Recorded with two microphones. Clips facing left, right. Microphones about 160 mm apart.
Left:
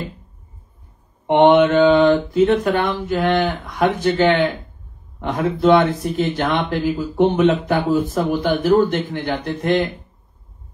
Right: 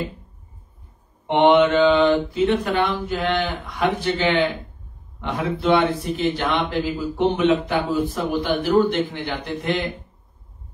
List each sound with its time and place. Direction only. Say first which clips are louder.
1.2 s speech: left 3 dB; 45° left (ahead or behind)